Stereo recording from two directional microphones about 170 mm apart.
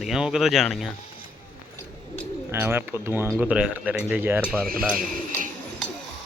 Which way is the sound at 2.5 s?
15° right (ahead or behind).